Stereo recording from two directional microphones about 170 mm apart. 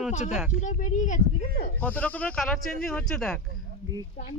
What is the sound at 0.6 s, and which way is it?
Speech, 45° left (ahead or behind).